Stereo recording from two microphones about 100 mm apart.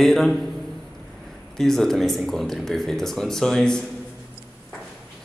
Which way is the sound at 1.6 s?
5° left (ahead or behind).